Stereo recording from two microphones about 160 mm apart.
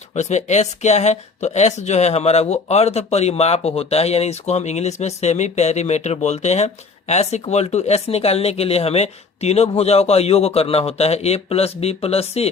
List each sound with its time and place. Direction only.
0.2 s speech: 45° left (ahead or behind)